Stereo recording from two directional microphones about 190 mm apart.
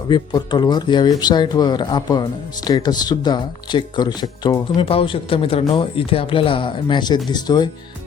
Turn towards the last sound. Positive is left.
turn(degrees=20)  # may be behind; listen again after turning